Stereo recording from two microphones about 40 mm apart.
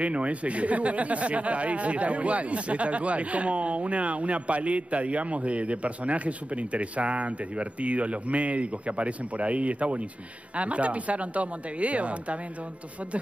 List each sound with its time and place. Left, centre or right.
0.0 s speech: right